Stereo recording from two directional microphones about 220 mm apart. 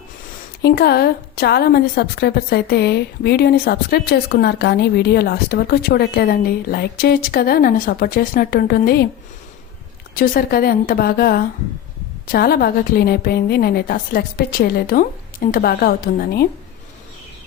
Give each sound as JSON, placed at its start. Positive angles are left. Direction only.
{"t": 0.6, "sound": "a woman's voice", "side_deg": 45}
{"t": 10.2, "sound": "a woman's voice", "side_deg": 40}